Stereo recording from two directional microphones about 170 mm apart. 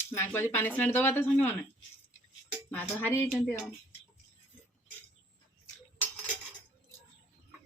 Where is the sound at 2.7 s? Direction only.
10° left (ahead or behind).